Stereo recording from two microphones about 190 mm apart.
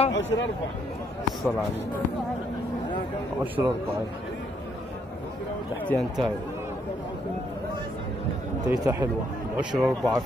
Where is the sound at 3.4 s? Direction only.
10° right (ahead or behind).